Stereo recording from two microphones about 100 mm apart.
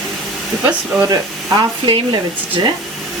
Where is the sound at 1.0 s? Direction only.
40° right (ahead or behind).